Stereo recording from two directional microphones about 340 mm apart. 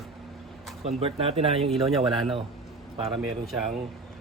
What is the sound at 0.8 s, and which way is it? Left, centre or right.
Speech, centre.